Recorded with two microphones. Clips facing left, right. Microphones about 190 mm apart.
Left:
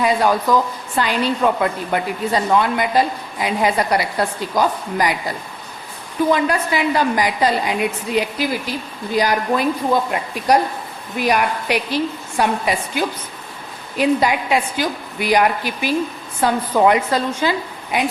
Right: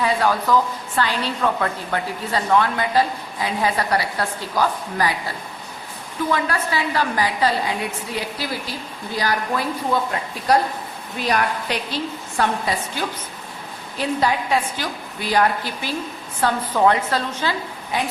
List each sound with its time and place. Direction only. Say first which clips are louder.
0.0 s a woman's voice: left 3 dB; 15° left (ahead or behind)
6.3 s a woman's voice: left 1 dB; 20° left (ahead or behind)